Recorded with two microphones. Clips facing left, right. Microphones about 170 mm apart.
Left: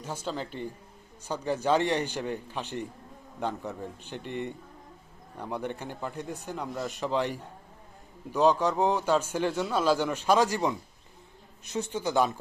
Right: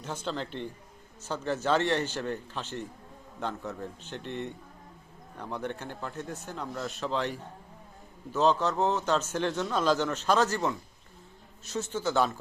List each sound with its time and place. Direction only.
0.0 s speech: 10° left (ahead or behind)